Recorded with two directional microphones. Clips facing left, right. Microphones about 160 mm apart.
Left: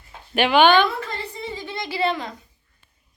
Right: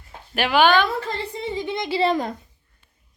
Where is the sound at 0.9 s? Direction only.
20° right (ahead or behind).